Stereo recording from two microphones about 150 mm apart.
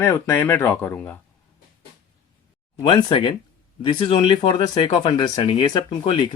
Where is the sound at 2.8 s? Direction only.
35° left (ahead or behind).